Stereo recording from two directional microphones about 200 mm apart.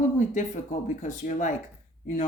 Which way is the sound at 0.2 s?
40° left (ahead or behind).